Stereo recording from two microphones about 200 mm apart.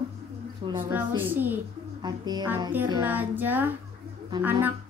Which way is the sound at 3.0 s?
10° right (ahead or behind).